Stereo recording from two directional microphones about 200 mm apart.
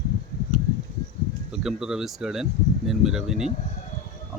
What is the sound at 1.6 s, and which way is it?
Speech, 5° right (ahead or behind).